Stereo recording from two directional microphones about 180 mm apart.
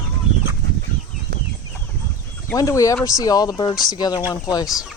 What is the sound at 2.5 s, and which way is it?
Speech, 20° left (ahead or behind).